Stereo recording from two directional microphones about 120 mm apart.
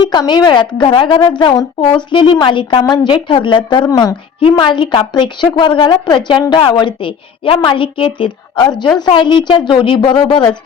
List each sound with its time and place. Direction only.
0.1 s a woman's voice: 40° left (ahead or behind)
4.4 s a woman's voice: 50° left (ahead or behind)